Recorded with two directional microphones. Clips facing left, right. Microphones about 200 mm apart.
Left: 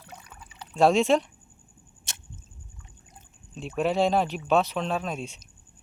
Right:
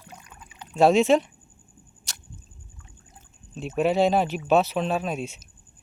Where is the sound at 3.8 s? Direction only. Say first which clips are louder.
Right 3 dB; centre (ahead or behind).